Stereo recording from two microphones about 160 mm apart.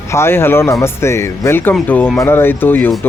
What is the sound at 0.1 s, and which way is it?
Speech, 15° left (ahead or behind).